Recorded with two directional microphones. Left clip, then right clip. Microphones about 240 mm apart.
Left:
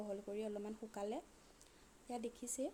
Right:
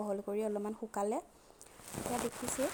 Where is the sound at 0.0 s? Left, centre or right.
Centre.